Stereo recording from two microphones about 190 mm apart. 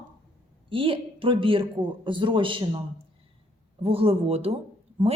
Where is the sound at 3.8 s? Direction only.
30° right (ahead or behind).